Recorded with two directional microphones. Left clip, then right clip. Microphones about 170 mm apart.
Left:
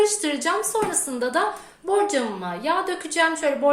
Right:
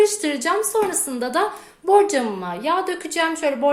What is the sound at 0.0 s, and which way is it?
A woman's voice, 25° right (ahead or behind).